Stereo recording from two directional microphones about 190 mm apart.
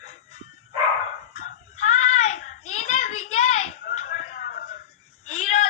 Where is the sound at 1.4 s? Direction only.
40° left (ahead or behind).